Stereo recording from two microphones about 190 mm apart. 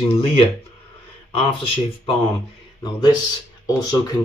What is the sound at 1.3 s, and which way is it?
Speech, 30° left (ahead or behind).